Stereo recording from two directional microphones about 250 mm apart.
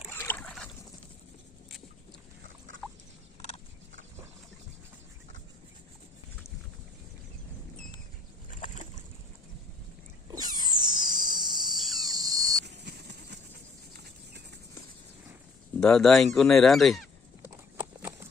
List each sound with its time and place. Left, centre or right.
0.1 s boat: centre
8.4 s boat: left
10.3 s a sound: centre
12.6 s horse: right
15.8 s speech: centre
17.7 s clip-clop: centre